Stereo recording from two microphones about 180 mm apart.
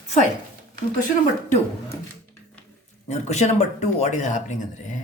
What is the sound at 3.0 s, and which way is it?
Speech, 35° left (ahead or behind).